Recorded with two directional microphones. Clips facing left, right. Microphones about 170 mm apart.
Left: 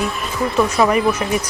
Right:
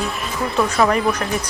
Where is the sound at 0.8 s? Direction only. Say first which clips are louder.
Left 1 dB; 5° left (ahead or behind).